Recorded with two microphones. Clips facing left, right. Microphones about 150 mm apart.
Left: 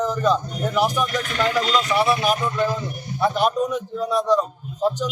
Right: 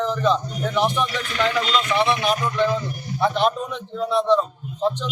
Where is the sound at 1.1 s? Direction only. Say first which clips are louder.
Left 1 dB; 45° left (ahead or behind).